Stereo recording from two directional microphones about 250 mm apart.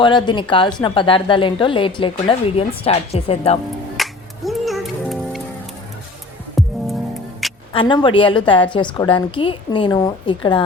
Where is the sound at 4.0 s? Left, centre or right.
Centre.